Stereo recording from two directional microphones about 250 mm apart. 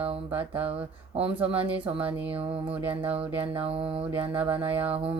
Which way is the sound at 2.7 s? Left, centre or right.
Centre.